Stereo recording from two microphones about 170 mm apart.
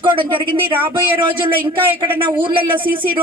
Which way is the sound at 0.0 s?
30° right (ahead or behind).